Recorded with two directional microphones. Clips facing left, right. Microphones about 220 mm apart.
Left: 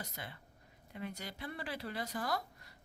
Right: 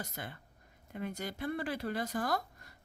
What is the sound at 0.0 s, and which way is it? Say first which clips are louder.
Speech: right 4 dB; 50° right (ahead or behind).